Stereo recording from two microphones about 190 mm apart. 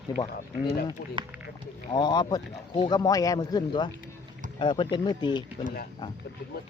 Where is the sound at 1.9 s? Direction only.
25° left (ahead or behind).